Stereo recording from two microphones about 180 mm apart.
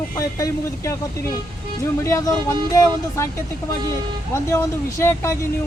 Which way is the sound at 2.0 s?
15° left (ahead or behind).